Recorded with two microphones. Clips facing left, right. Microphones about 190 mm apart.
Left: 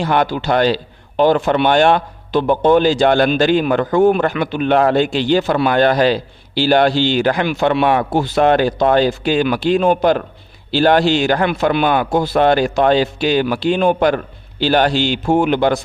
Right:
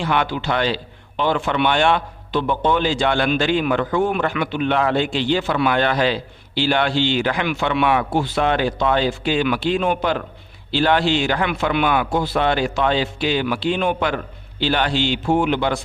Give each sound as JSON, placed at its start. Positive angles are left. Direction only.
{"t": 0.0, "sound": "a man's voice", "side_deg": 40}